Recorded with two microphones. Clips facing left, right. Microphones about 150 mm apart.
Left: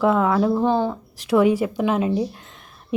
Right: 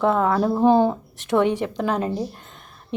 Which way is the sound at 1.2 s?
5° left (ahead or behind).